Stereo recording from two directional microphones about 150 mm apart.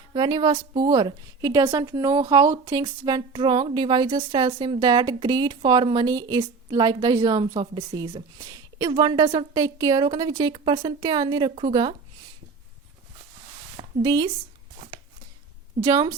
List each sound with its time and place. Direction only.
0.1 s speech: 30° right (ahead or behind)
13.7 s a sound: 25° right (ahead or behind)
15.8 s speech: 25° right (ahead or behind)